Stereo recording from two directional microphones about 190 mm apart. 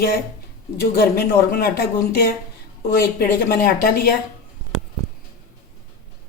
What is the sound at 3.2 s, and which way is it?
Speech, 50° left (ahead or behind).